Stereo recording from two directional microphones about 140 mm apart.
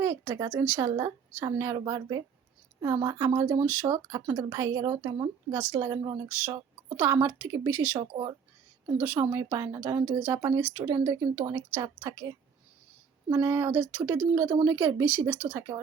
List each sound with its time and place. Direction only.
0.0 s speech: 20° right (ahead or behind)
7.9 s speech: 30° right (ahead or behind)
9.0 s speech: 20° right (ahead or behind)